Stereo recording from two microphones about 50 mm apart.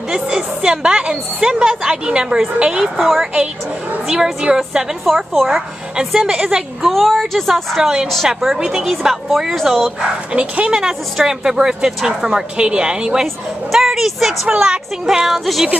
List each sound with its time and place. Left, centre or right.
0.1 s a woman's voice: centre
3.0 s a woman's voice: centre
4.0 s a woman's voice: centre
5.0 s a woman's voice: centre
6.9 s a woman's voice: centre
9.9 s a woman's voice: right; by 15.7 s centre